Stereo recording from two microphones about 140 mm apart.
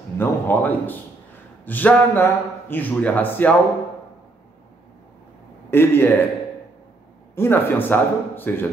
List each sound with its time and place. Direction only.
0.2 s a man's voice: 15° left (ahead or behind)
5.7 s a man's voice: 15° left (ahead or behind)
7.3 s a man's voice: 15° left (ahead or behind)